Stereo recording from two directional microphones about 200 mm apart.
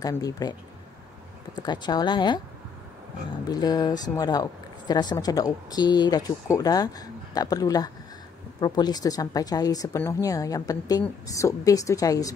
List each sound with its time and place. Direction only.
0.0 s speech: 20° left (ahead or behind)
3.4 s a woman's voice: 20° left (ahead or behind)